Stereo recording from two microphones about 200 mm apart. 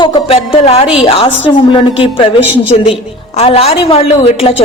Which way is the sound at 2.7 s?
30° left (ahead or behind).